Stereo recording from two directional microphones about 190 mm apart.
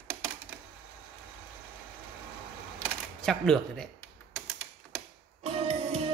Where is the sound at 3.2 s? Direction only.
5° left (ahead or behind).